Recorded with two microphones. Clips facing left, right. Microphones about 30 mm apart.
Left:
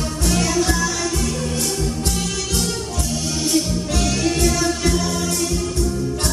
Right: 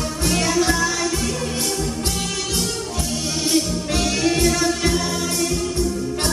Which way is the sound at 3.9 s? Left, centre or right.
Centre.